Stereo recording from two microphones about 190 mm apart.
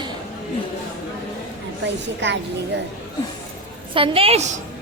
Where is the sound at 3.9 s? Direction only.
30° right (ahead or behind).